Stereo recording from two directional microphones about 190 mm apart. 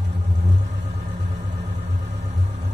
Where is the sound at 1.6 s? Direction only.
35° right (ahead or behind).